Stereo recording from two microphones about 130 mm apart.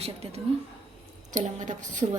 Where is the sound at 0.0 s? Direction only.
55° right (ahead or behind).